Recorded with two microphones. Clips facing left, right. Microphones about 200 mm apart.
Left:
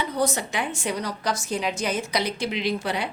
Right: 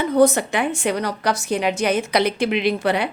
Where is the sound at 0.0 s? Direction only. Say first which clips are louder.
Right 9 dB; 55° right (ahead or behind).